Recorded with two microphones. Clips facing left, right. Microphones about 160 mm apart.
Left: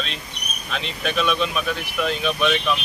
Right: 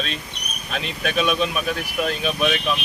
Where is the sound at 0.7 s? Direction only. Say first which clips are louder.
Right 1 dB; 45° right (ahead or behind).